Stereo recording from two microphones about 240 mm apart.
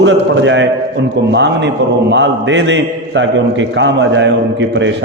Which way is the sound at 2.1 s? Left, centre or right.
Right.